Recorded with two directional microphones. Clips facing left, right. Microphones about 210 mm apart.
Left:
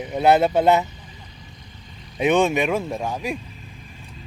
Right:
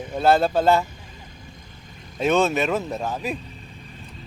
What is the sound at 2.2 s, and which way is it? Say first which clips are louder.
Speech: left 2 dB; 15° left (ahead or behind).